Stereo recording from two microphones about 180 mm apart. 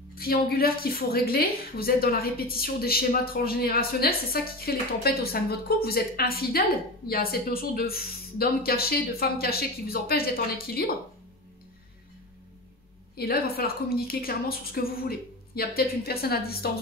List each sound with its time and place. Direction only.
0.1 s a woman's voice: 55° left (ahead or behind)
13.1 s a woman's voice: 55° left (ahead or behind)